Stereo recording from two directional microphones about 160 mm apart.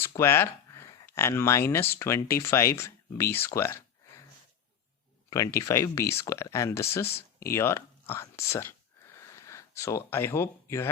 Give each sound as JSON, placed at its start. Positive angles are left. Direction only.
{"t": 0.2, "sound": "speech", "side_deg": 15}
{"t": 5.5, "sound": "speech", "side_deg": 20}
{"t": 9.1, "sound": "a sound", "side_deg": 20}